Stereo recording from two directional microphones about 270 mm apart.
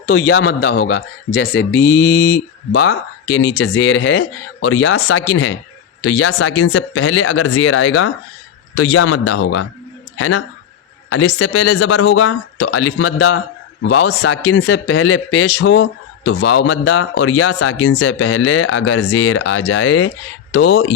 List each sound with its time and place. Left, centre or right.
0.0 s a man's voice: left